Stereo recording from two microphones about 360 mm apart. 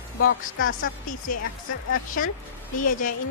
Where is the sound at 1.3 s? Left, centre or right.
Left.